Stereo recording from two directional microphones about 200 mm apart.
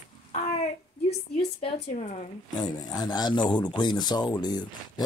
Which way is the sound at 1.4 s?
30° left (ahead or behind).